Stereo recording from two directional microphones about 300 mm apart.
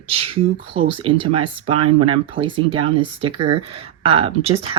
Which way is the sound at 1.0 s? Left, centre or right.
Centre.